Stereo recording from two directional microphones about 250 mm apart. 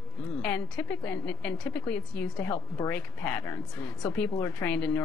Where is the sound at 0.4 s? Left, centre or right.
Centre.